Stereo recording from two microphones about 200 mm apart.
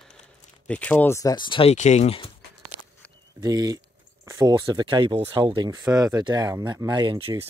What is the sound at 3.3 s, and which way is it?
Speech, 20° right (ahead or behind).